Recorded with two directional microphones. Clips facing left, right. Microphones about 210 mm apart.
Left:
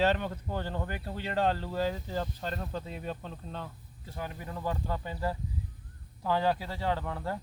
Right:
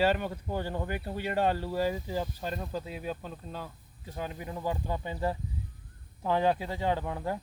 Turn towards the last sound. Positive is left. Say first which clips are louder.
# right 2 dB
turn(degrees=-15)  # may be behind; listen again after turning